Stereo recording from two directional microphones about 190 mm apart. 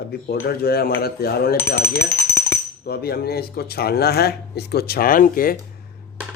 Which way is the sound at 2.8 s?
55° left (ahead or behind).